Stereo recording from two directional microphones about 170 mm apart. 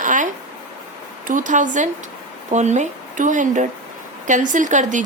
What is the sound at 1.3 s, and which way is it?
A woman's voice, 50° right (ahead or behind).